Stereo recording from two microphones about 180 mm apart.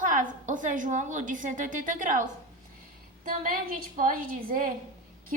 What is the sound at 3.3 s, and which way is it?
A woman's voice, 50° right (ahead or behind).